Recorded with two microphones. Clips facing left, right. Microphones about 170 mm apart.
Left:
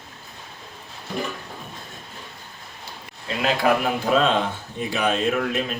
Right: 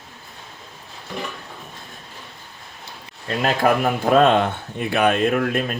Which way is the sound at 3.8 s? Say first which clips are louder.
Right 4 dB; 55° right (ahead or behind).